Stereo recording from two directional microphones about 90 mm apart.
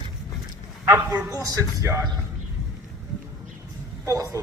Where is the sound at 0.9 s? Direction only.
25° right (ahead or behind).